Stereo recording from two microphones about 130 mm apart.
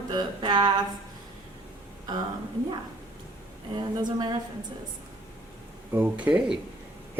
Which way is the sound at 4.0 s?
35° right (ahead or behind).